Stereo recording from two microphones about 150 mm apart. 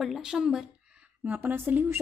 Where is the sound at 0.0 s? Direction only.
5° right (ahead or behind).